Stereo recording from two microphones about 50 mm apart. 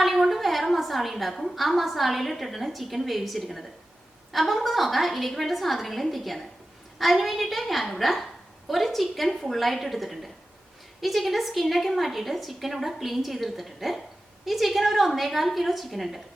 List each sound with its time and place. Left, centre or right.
0.0 s a woman's voice: centre